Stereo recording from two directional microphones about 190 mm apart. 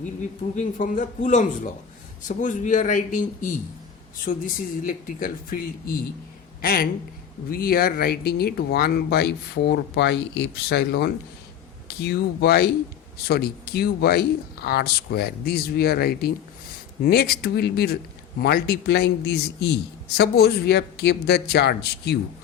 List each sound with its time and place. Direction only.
0.0 s a man's voice: 40° left (ahead or behind); by 22.2 s 60° left (ahead or behind)